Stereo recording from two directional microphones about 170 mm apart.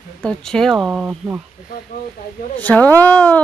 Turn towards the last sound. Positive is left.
turn(degrees=10)  # may be behind; listen again after turning